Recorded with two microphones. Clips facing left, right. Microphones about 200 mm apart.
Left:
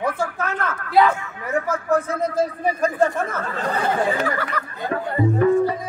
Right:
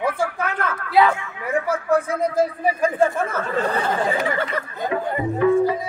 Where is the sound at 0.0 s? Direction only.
10° right (ahead or behind).